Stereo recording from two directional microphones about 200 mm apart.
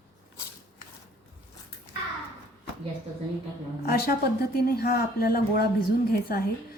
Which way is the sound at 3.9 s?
50° left (ahead or behind).